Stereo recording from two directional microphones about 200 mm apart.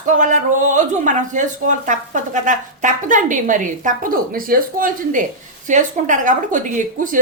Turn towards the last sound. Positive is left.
turn(degrees=-40)  # may be behind; listen again after turning